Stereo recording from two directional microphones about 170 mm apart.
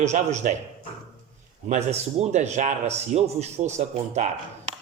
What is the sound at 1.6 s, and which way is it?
Speech, 40° right (ahead or behind).